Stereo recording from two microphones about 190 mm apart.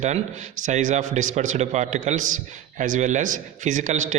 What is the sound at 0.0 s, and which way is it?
A man's voice, 40° right (ahead or behind).